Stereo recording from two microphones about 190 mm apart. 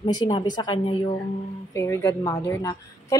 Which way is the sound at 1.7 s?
15° left (ahead or behind).